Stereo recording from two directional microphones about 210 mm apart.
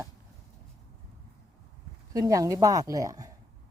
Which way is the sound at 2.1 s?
15° right (ahead or behind).